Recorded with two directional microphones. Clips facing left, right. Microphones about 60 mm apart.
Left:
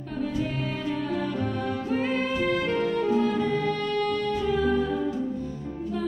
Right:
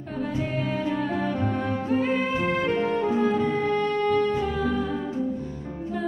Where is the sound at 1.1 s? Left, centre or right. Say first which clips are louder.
Right 2 dB; right.